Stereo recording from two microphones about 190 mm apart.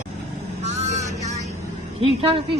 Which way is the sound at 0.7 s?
35° right (ahead or behind).